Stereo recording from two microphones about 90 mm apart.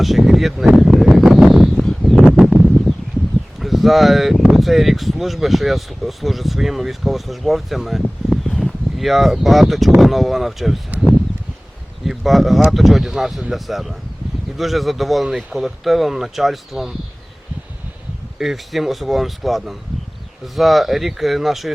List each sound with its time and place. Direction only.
0.0 s speech: centre (ahead or behind)
0.7 s a sound: centre (ahead or behind)
3.6 s speech: centre (ahead or behind)
8.3 s a sound: 5° left (ahead or behind)
10.0 s speech: centre (ahead or behind)
12.0 s speech: centre (ahead or behind)
18.3 s speech: centre (ahead or behind)